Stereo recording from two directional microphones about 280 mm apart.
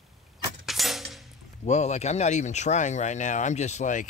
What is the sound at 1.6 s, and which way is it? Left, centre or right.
Speech, left.